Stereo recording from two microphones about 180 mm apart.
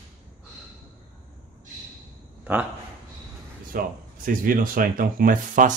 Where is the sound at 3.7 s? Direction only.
50° right (ahead or behind).